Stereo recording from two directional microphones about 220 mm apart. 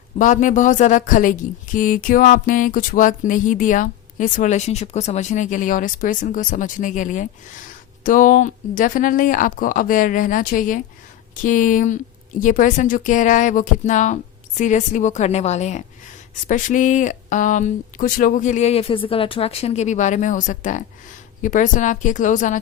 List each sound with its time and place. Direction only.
0.2 s speech: 35° left (ahead or behind)